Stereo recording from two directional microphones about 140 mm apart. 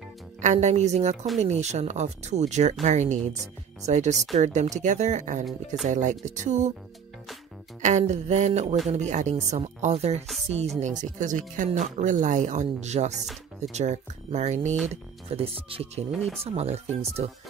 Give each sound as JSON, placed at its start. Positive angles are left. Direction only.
{"t": 0.4, "sound": "speech", "side_deg": -55}
{"t": 7.8, "sound": "speech", "side_deg": -55}
{"t": 10.8, "sound": "speech", "side_deg": -60}
{"t": 15.2, "sound": "speech", "side_deg": -45}
{"t": 16.1, "sound": "speech", "side_deg": 0}
{"t": 16.3, "sound": "speech", "side_deg": -50}